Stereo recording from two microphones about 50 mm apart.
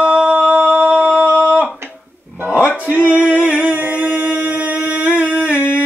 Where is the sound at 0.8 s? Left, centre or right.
Centre.